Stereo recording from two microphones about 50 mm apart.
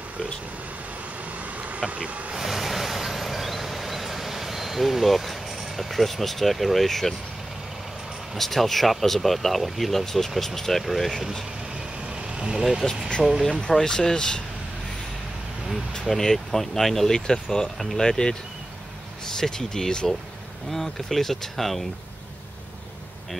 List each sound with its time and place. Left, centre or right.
1.4 s bee: right
2.0 s speech: right
2.3 s vehicle: centre
8.4 s speech: centre
12.1 s vehicle: centre
12.8 s speech: centre
16.1 s speech: centre
19.3 s speech: centre